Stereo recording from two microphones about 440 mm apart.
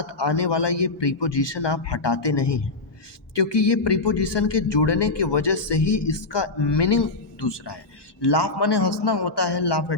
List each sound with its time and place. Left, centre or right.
0.0 s a man's voice: left